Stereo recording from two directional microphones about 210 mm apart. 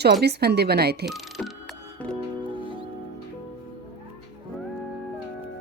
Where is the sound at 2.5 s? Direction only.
20° left (ahead or behind).